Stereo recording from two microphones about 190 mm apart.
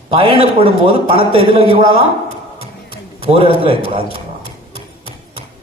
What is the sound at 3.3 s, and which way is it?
Speech, 30° right (ahead or behind).